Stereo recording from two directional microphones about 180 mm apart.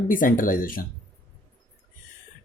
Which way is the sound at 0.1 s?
50° left (ahead or behind).